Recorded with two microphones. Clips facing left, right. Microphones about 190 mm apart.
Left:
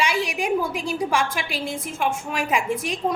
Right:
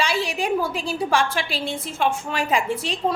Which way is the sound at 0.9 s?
30° right (ahead or behind).